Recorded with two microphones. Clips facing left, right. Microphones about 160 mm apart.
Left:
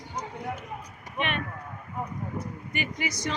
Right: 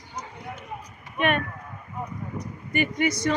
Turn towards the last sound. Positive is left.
turn(degrees=-55)  # may be behind; listen again after turning